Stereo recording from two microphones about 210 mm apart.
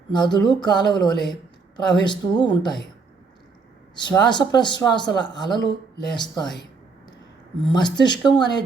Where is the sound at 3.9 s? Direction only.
20° left (ahead or behind).